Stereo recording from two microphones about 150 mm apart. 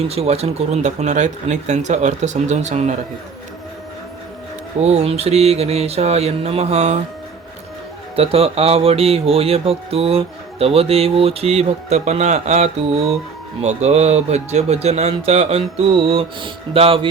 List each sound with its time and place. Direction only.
0.1 s speech: 45° right (ahead or behind)
4.8 s speech: 45° right (ahead or behind)
8.1 s speech: 40° right (ahead or behind)